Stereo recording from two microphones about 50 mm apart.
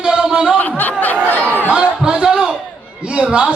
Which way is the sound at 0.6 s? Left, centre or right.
Left.